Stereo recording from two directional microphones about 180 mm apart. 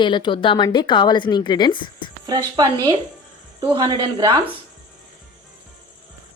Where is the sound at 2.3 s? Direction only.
20° right (ahead or behind).